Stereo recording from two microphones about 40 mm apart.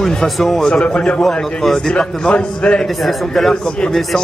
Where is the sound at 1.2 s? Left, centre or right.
Centre.